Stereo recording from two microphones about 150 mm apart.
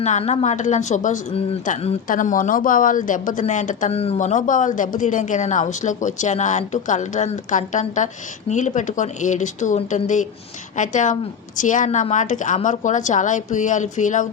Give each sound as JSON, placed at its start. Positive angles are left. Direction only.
{"t": 0.0, "sound": "a woman's voice", "side_deg": 50}
{"t": 3.9, "sound": "speech", "side_deg": 40}